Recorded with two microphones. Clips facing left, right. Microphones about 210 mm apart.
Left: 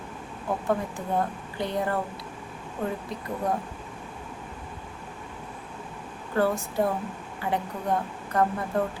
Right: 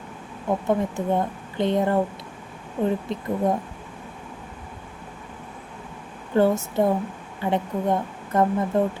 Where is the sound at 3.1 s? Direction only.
25° right (ahead or behind).